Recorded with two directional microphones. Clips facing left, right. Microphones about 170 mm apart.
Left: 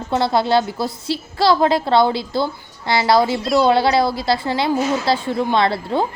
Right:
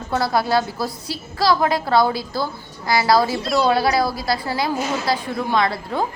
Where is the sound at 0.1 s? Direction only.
25° left (ahead or behind).